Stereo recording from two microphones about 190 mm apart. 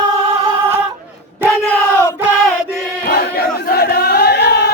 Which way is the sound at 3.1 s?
55° left (ahead or behind).